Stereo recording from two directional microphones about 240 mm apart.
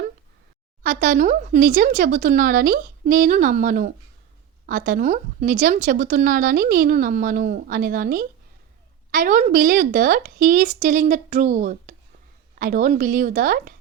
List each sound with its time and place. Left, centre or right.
0.8 s speech: right